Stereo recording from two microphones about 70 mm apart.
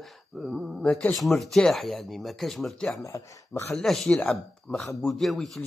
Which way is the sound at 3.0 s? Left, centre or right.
Left.